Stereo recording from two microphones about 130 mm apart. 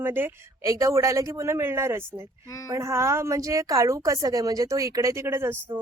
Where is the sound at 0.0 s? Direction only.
15° right (ahead or behind).